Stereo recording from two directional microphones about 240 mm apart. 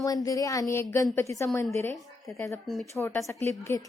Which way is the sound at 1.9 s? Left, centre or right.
Centre.